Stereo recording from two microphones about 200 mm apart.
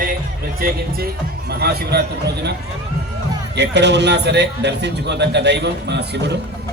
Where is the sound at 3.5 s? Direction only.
60° right (ahead or behind).